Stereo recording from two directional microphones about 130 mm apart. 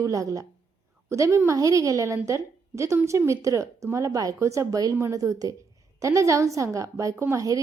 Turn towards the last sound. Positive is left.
turn(degrees=-25)  # may be behind; listen again after turning